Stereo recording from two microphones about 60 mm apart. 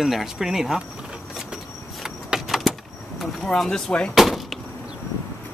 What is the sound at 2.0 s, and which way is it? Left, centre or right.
Vehicle, centre.